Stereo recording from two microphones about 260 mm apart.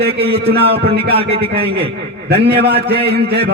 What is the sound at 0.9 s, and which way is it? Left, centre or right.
Speech, right.